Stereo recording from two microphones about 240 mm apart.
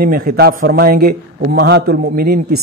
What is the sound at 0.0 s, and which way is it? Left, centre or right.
A man's voice, right.